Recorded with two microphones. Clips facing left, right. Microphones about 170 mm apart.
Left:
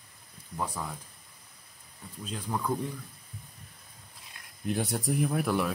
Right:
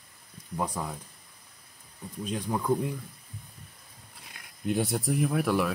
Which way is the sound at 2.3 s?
15° right (ahead or behind).